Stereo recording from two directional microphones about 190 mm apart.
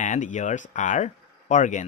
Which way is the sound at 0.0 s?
40° left (ahead or behind).